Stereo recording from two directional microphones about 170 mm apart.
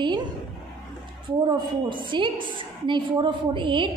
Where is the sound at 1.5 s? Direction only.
30° right (ahead or behind).